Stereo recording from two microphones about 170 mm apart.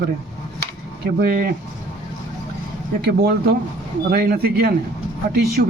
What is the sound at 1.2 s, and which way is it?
Speech, 65° right (ahead or behind).